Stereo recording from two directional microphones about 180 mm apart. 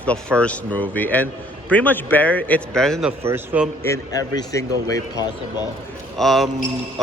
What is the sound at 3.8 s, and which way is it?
A man's voice, 15° left (ahead or behind).